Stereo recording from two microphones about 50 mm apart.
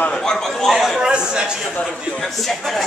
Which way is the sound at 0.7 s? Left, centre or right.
Centre.